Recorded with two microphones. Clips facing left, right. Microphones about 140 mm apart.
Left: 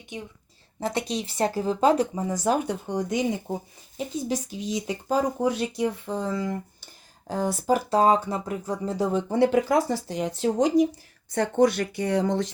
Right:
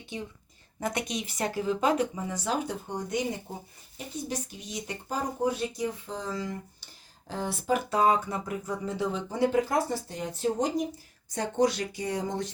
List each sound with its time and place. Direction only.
0.1 s a woman's voice: 20° left (ahead or behind); by 2.6 s 45° left (ahead or behind)
2.6 s speech: 90° left
3.5 s speech: 45° left (ahead or behind)
3.9 s speech: 90° left; by 9.2 s 40° left (ahead or behind)
9.3 s speech: 80° left
11.3 s speech: 60° left (ahead or behind); by 12.5 s 75° left (ahead or behind)